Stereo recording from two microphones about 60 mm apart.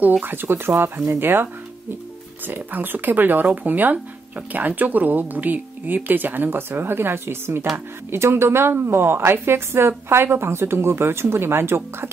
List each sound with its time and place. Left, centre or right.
0.2 s speech: right